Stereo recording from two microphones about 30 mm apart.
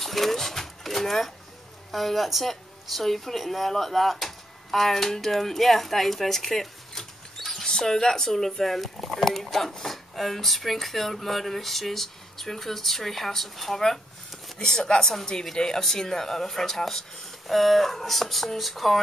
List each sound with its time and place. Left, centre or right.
0.0 s a sound: centre
1.9 s a woman's voice: centre
7.6 s speech: centre
14.6 s speech: left; by 18.9 s centre